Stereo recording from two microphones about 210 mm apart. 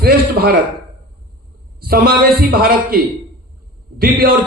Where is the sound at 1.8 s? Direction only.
45° right (ahead or behind).